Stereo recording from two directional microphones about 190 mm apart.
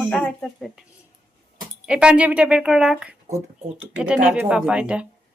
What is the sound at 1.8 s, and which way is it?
Speech, 5° right (ahead or behind).